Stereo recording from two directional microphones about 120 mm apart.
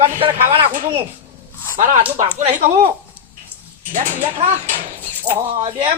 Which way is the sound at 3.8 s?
90° right.